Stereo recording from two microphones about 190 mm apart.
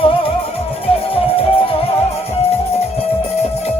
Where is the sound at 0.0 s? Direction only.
30° left (ahead or behind).